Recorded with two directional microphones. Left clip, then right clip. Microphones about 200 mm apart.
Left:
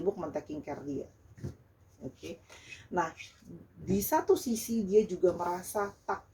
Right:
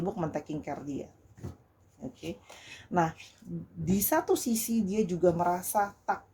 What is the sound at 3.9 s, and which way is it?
Speech, 50° right (ahead or behind).